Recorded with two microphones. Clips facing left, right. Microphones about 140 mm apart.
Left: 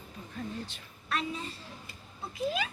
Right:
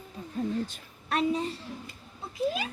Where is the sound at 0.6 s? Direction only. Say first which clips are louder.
Right 8 dB; 45° right (ahead or behind).